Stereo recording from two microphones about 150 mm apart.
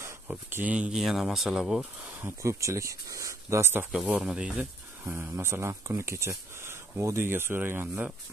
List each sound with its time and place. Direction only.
0.0 s speech: 15° right (ahead or behind)
2.4 s speech: 20° right (ahead or behind)
3.9 s speech: centre (ahead or behind)